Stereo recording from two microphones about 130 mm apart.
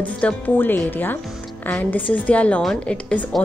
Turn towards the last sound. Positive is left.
turn(degrees=5)  # may be behind; listen again after turning